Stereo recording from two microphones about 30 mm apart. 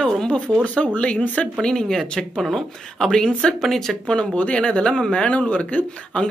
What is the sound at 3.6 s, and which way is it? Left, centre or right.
Speech, centre.